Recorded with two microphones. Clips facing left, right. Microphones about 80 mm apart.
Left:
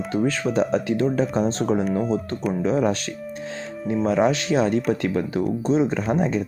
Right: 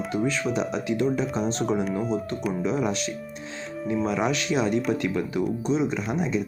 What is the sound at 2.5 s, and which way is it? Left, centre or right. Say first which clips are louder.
Speech: left 5 dB; left.